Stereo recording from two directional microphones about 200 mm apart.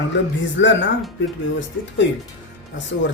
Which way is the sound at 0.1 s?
65° left (ahead or behind).